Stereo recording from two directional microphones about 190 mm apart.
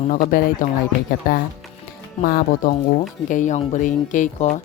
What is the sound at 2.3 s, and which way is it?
Speech, 55° left (ahead or behind).